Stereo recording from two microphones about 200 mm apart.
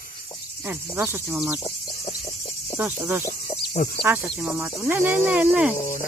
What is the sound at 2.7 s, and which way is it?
Cricket, 10° right (ahead or behind).